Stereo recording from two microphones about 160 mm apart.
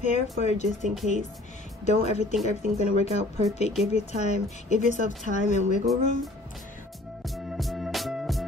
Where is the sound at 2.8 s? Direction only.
40° left (ahead or behind).